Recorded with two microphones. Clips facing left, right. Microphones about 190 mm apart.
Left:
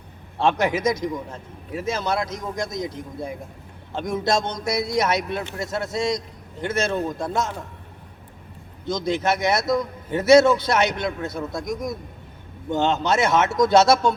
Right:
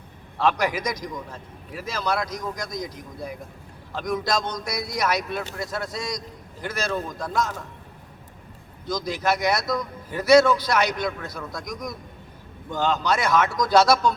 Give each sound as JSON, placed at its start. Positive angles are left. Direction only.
{"t": 0.3, "sound": "a man's voice", "side_deg": 25}
{"t": 8.9, "sound": "a man's voice", "side_deg": 25}